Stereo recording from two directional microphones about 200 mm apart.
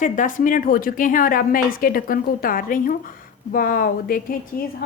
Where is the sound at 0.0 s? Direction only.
40° left (ahead or behind).